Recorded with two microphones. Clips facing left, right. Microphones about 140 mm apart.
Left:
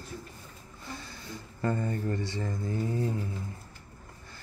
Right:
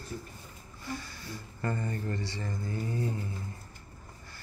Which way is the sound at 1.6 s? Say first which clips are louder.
Left 4 dB; 15° left (ahead or behind).